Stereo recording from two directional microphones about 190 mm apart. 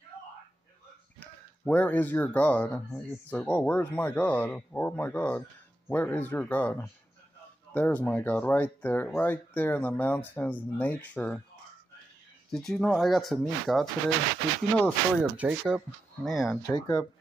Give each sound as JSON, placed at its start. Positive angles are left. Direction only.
{"t": 1.6, "sound": "speech", "side_deg": 10}
{"t": 12.4, "sound": "speech", "side_deg": 0}
{"t": 15.3, "sound": "speech", "side_deg": -5}
{"t": 16.6, "sound": "speech", "side_deg": 20}